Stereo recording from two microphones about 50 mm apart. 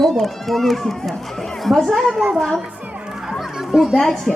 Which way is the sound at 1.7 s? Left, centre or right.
Centre.